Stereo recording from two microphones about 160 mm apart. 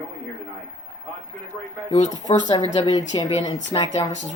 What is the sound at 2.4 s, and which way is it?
Speech, 25° left (ahead or behind).